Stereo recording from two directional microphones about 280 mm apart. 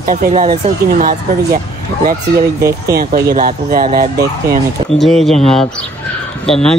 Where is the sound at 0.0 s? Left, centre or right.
Right.